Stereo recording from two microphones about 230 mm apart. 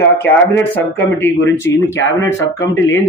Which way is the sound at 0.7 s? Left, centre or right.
Centre.